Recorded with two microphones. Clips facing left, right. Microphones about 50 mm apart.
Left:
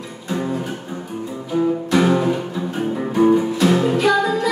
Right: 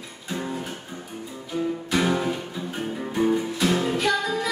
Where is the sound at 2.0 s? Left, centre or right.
Centre.